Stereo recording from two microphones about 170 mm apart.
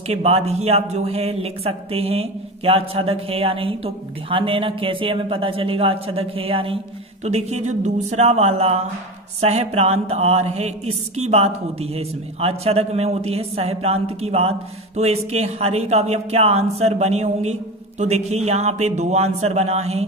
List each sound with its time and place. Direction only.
0.1 s speech: 40° right (ahead or behind)